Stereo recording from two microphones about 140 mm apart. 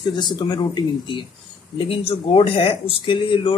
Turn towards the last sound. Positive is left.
turn(degrees=35)  # may be behind; listen again after turning